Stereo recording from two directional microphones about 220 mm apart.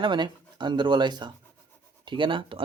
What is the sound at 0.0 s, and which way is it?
Speech, 20° right (ahead or behind).